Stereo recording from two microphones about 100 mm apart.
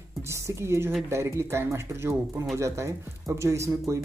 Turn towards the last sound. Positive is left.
turn(degrees=-30)  # may be behind; listen again after turning